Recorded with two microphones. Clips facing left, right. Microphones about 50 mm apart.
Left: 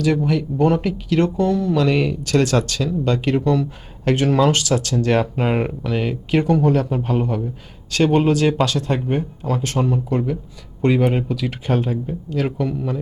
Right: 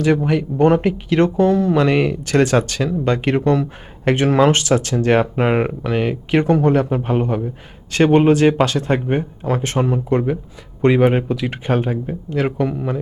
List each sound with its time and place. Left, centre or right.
0.0 s speech: right